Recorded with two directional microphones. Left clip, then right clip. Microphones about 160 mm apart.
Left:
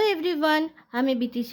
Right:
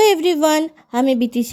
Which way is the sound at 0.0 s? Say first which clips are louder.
Right 9 dB; 35° right (ahead or behind).